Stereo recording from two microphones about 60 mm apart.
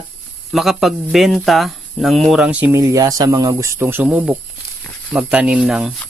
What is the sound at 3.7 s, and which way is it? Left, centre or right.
Speech, right.